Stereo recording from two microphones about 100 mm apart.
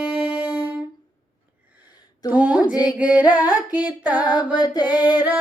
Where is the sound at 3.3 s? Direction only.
15° right (ahead or behind).